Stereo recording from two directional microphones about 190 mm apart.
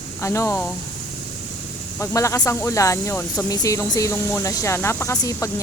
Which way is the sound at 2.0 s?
15° left (ahead or behind).